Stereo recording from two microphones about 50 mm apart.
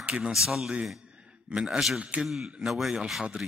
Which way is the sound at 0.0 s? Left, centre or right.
Right.